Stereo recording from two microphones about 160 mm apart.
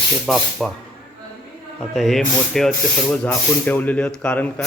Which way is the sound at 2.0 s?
Centre (ahead or behind).